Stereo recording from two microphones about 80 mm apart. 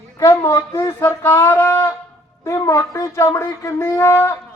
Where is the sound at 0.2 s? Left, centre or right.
Left.